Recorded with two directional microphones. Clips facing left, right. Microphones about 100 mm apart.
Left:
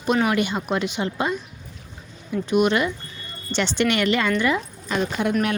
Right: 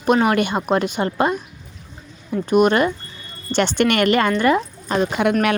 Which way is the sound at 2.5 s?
45° right (ahead or behind).